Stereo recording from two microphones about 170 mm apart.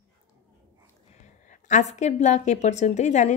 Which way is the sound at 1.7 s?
45° left (ahead or behind).